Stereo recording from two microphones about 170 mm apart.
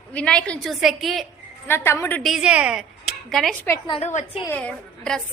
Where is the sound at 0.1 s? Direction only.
5° left (ahead or behind).